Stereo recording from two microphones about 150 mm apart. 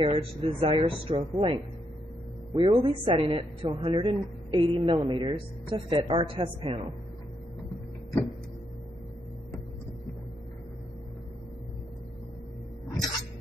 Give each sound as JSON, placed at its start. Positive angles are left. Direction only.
{"t": 0.0, "sound": "a woman's voice", "side_deg": -40}